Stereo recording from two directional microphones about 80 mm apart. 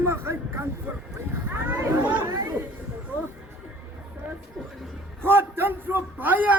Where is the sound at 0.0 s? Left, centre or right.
Right.